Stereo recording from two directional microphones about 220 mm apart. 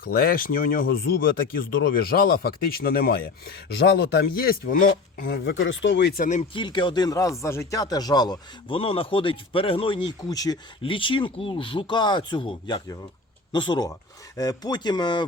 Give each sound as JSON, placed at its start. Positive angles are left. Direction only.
{"t": 0.0, "sound": "speech", "side_deg": 40}
{"t": 6.5, "sound": "speech", "side_deg": 20}